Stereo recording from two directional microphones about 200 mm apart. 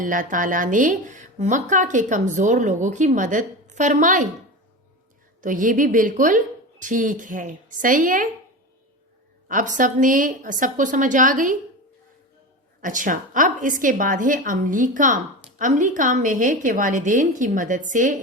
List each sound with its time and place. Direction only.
0.0 s a woman's voice: 40° right (ahead or behind)
5.4 s a woman's voice: 40° right (ahead or behind)
9.5 s a woman's voice: 40° right (ahead or behind)
12.8 s a woman's voice: 40° right (ahead or behind)